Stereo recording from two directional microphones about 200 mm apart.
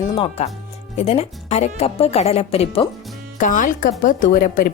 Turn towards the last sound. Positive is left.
turn(degrees=45)  # may be behind; listen again after turning